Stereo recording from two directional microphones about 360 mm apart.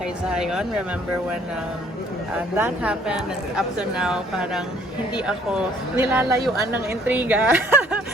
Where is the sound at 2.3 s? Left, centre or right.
Centre.